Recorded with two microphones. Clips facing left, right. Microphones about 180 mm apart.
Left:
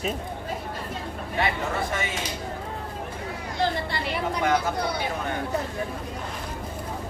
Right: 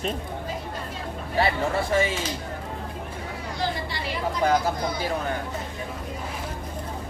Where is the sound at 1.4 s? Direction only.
35° right (ahead or behind).